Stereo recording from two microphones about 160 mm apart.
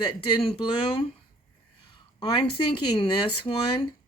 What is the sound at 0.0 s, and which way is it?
Speech, 30° left (ahead or behind).